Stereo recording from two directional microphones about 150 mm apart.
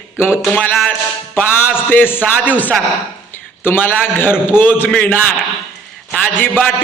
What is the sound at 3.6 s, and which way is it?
A man's voice, 15° left (ahead or behind).